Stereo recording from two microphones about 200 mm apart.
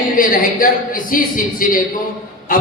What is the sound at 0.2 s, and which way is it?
A man's voice, 45° left (ahead or behind).